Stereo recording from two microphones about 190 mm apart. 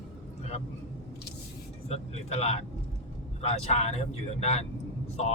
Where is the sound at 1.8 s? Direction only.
35° left (ahead or behind).